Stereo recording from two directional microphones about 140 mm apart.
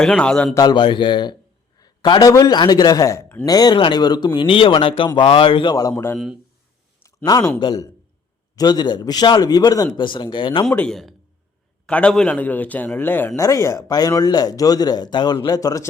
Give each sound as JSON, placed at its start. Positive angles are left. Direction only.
{"t": 0.0, "sound": "a man's voice", "side_deg": 5}
{"t": 0.5, "sound": "a man's voice", "side_deg": 30}
{"t": 3.4, "sound": "speech", "side_deg": 25}
{"t": 5.9, "sound": "a man's voice", "side_deg": 15}
{"t": 7.3, "sound": "a man's voice", "side_deg": 25}
{"t": 10.8, "sound": "a man's voice", "side_deg": 5}